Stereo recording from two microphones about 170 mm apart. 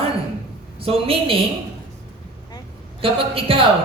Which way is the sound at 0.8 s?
35° right (ahead or behind).